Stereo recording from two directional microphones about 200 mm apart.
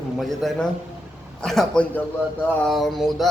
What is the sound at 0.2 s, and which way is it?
A man's voice, centre (ahead or behind).